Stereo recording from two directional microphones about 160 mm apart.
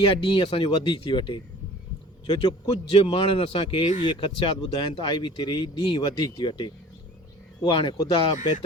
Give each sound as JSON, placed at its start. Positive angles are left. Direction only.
{"t": 0.1, "sound": "speech", "side_deg": 35}